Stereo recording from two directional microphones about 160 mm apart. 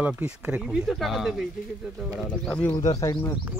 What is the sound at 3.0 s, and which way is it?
Speech, 20° left (ahead or behind).